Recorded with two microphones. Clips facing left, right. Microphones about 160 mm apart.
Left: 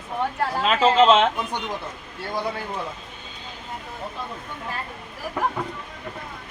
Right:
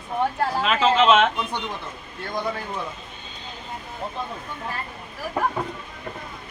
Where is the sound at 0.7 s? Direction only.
35° left (ahead or behind).